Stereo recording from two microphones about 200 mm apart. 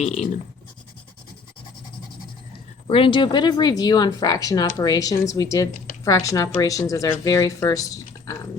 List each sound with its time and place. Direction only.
0.0 s speech: 35° left (ahead or behind)
2.8 s a woman's voice: 25° left (ahead or behind)